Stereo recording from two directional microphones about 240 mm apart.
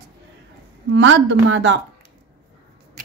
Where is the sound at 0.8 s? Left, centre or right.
Right.